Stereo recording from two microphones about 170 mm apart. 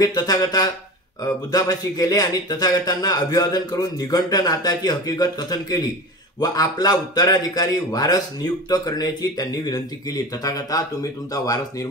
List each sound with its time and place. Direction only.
0.0 s a man's voice: 20° left (ahead or behind)